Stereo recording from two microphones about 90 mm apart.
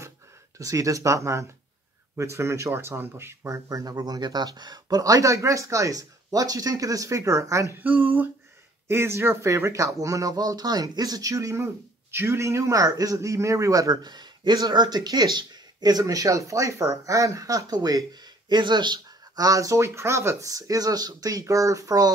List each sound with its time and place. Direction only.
0.6 s speech: 40° right (ahead or behind)
7.8 s speech: 20° right (ahead or behind); by 19.4 s 55° right (ahead or behind)
19.4 s speech: 40° right (ahead or behind)